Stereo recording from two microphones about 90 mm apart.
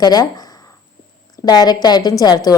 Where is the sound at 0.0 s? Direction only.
45° left (ahead or behind).